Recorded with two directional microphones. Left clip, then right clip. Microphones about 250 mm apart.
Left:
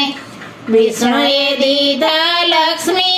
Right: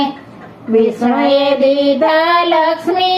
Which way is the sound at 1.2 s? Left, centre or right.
Left.